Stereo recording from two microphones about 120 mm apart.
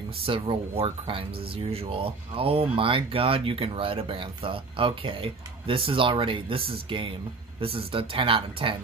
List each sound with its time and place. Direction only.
0.2 s speech: 50° right (ahead or behind)